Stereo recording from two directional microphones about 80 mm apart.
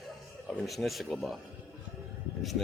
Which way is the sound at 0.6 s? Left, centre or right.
Centre.